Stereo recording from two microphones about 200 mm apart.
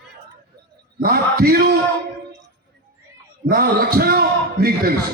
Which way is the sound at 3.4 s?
50° right (ahead or behind).